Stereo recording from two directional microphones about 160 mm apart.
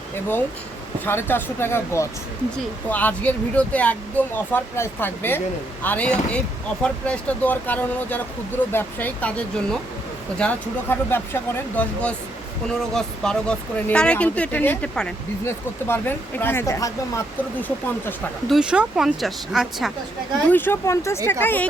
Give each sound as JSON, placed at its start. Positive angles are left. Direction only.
{"t": 1.0, "sound": "speech", "side_deg": 15}
{"t": 18.4, "sound": "speech", "side_deg": -5}
{"t": 20.5, "sound": "speech", "side_deg": 15}